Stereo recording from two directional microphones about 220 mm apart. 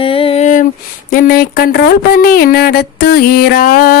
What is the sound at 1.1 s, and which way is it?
Speech, 40° left (ahead or behind).